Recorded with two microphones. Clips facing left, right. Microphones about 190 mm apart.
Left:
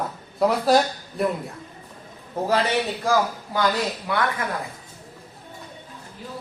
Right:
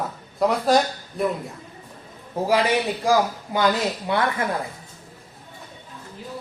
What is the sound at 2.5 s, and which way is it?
Speech, 15° right (ahead or behind).